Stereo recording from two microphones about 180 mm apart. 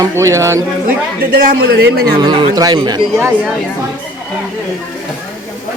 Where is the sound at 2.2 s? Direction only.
25° right (ahead or behind).